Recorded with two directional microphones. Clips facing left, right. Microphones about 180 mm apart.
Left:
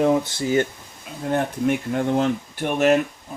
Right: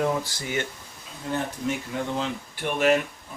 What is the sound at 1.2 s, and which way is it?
Speech, 55° left (ahead or behind).